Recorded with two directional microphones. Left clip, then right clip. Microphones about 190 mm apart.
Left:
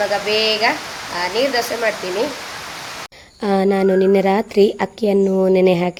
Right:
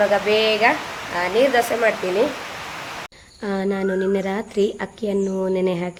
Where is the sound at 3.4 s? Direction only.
40° left (ahead or behind).